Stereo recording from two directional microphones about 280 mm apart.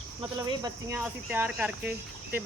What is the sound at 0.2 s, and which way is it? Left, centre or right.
Speech, centre.